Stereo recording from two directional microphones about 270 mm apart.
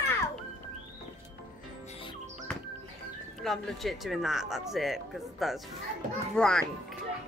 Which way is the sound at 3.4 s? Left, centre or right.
Centre.